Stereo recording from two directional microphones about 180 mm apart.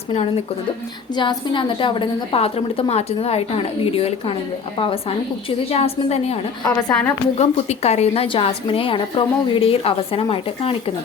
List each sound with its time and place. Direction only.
1.1 s a woman's voice: 25° left (ahead or behind)
6.7 s a woman's voice: 15° left (ahead or behind)
7.3 s a woman's voice: 35° left (ahead or behind)